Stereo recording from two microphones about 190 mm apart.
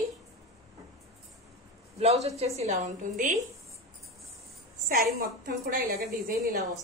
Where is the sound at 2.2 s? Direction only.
35° right (ahead or behind).